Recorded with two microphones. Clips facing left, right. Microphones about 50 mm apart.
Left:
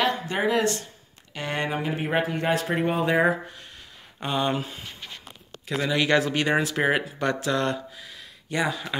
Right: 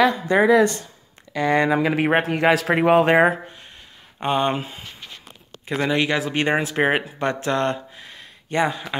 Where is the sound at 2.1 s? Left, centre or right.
Right.